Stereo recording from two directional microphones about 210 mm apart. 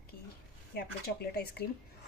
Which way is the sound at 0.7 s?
50° left (ahead or behind).